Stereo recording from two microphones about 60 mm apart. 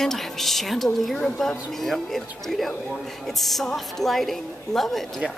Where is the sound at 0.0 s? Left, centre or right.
Centre.